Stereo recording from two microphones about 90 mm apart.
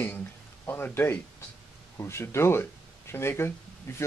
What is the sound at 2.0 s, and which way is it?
Speech, 30° left (ahead or behind).